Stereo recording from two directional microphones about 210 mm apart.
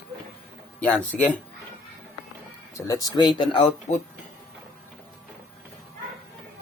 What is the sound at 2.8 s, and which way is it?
Speech, 15° left (ahead or behind).